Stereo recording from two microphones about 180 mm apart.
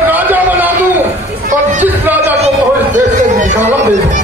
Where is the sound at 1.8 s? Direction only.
10° right (ahead or behind).